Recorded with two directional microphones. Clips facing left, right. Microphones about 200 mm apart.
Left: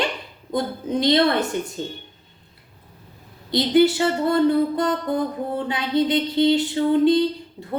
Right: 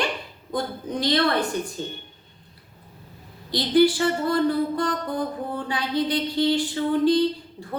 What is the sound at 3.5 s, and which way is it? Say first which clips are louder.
A woman's voice: left 2 dB; 25° left (ahead or behind).